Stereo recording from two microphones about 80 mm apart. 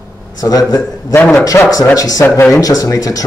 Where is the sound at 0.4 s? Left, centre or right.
Left.